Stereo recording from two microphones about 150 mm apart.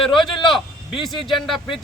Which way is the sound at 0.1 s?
35° left (ahead or behind).